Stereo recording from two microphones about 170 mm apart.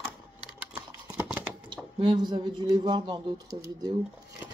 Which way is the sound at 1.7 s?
30° right (ahead or behind).